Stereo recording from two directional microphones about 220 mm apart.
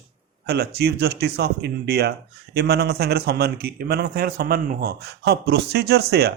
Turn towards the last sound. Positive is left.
turn(degrees=-45)  # may be behind; listen again after turning